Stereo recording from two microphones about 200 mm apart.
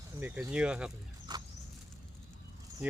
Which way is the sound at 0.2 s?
10° right (ahead or behind).